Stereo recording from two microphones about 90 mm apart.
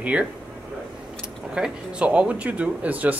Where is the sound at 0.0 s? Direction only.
10° right (ahead or behind).